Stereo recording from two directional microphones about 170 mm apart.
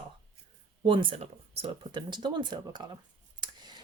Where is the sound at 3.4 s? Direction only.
25° right (ahead or behind).